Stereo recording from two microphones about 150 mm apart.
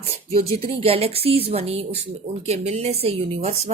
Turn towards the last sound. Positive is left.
turn(degrees=-40)  # may be behind; listen again after turning